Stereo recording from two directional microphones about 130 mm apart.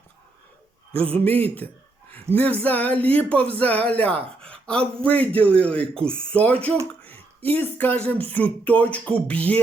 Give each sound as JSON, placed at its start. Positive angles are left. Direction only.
{"t": 1.1, "sound": "speech", "side_deg": 15}